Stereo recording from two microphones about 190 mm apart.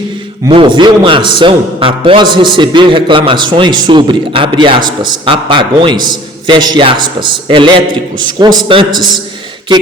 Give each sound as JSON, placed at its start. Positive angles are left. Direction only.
{"t": 0.4, "sound": "a man's voice", "side_deg": -25}